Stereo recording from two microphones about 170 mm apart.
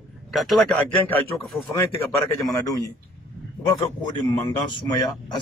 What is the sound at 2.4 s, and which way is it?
A man's voice, 20° left (ahead or behind).